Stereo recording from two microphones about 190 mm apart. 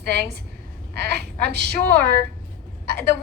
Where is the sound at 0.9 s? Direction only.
60° right (ahead or behind).